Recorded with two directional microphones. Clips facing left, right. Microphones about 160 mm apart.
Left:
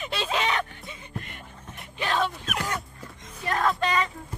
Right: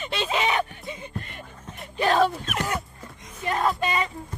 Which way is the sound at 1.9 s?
40° right (ahead or behind).